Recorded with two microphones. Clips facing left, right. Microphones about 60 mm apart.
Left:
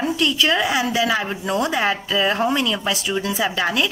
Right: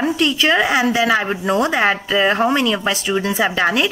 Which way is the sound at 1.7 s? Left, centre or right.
Centre.